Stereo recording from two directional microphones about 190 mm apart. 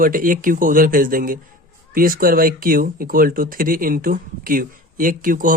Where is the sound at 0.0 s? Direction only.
45° right (ahead or behind).